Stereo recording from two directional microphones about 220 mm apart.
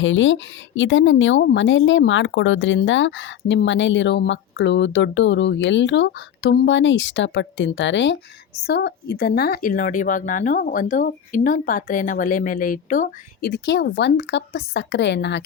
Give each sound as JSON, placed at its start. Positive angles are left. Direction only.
{"t": 0.0, "sound": "speech", "side_deg": 60}